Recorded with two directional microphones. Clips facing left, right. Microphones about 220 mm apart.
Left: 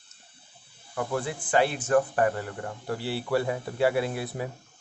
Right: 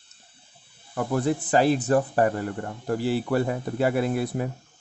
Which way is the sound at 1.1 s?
40° right (ahead or behind).